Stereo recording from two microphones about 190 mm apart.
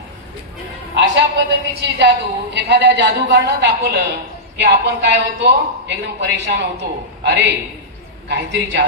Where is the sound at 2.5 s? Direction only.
65° right (ahead or behind).